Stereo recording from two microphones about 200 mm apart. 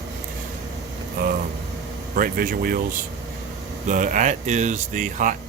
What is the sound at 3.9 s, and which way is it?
Speech, 40° right (ahead or behind).